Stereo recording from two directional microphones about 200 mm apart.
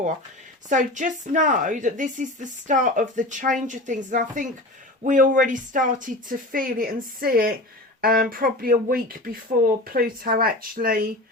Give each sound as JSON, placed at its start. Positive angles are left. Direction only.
{"t": 0.7, "sound": "a woman's voice", "side_deg": -40}